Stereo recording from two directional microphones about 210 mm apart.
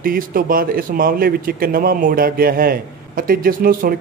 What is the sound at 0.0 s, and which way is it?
Speech, 45° right (ahead or behind).